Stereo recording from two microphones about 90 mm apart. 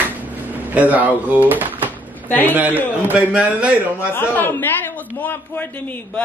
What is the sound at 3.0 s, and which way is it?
A man's voice, 15° right (ahead or behind).